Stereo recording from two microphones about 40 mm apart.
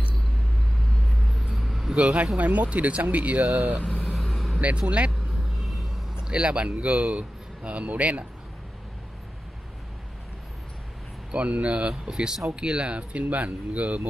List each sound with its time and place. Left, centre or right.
1.2 s vehicle: centre
2.0 s speech: right
4.0 s vehicle: centre
4.6 s speech: right
6.3 s speech: right
11.3 s speech: right
12.1 s speech: centre; by 14.0 s right